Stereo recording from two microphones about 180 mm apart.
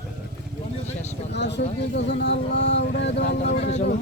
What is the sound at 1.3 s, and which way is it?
Speech, 70° left (ahead or behind).